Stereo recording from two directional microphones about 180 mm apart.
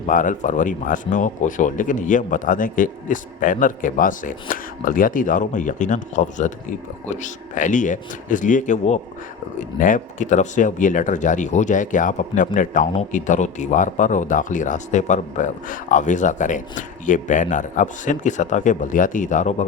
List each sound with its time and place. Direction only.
0.0 s speech: 45° left (ahead or behind)